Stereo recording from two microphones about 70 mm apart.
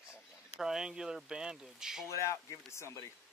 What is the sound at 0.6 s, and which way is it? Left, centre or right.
Speech, centre.